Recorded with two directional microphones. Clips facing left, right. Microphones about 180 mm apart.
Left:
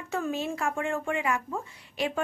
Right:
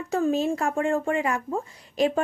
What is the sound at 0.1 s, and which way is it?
Speech, 40° right (ahead or behind).